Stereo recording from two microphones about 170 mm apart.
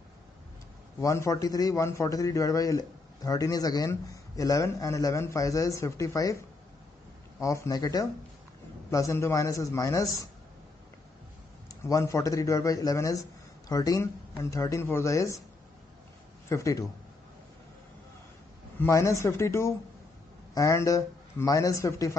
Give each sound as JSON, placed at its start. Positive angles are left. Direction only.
{"t": 1.0, "sound": "a man's voice", "side_deg": 20}
{"t": 11.9, "sound": "a man's voice", "side_deg": 20}
{"t": 16.4, "sound": "a man's voice", "side_deg": 20}
{"t": 18.8, "sound": "a man's voice", "side_deg": 20}